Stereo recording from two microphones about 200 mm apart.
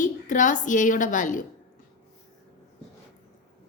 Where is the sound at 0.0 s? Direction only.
40° left (ahead or behind).